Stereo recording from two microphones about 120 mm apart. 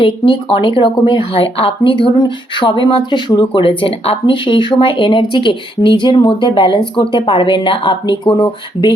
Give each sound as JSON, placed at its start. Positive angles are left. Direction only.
{"t": 0.0, "sound": "a woman's voice", "side_deg": 45}